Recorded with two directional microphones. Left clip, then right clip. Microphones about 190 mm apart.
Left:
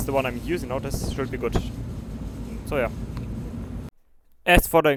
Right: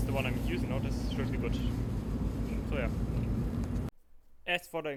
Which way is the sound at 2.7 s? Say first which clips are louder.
Left 13 dB; 45° left (ahead or behind).